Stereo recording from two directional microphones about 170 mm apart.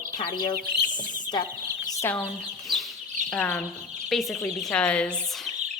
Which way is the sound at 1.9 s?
15° left (ahead or behind).